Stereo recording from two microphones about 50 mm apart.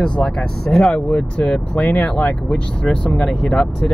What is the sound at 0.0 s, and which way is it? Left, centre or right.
Speech, centre.